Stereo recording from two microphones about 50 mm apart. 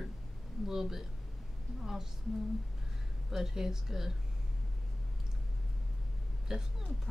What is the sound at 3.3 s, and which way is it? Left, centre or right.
Speech, centre.